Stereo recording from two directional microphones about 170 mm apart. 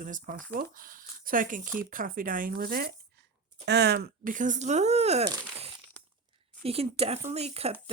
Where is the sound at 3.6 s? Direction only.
75° right (ahead or behind).